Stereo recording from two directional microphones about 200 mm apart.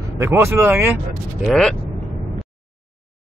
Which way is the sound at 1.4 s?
5° left (ahead or behind).